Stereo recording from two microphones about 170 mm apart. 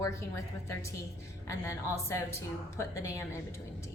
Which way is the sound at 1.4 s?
15° left (ahead or behind).